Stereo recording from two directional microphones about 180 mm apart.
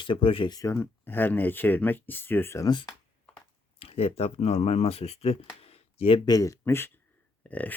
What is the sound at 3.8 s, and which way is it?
Speech, 35° left (ahead or behind).